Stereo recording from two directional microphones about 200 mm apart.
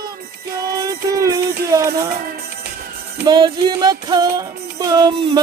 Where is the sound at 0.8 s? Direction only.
15° right (ahead or behind).